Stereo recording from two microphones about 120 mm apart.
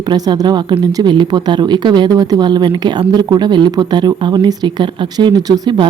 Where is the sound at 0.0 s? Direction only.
35° right (ahead or behind).